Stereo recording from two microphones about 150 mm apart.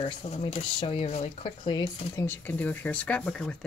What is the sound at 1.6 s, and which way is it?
Speech, 30° left (ahead or behind).